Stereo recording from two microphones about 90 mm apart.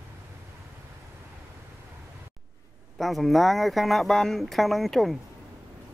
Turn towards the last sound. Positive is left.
turn(degrees=0)  # may be behind; listen again after turning